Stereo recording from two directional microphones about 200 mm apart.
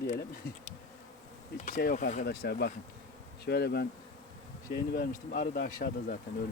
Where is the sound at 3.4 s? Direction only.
55° left (ahead or behind).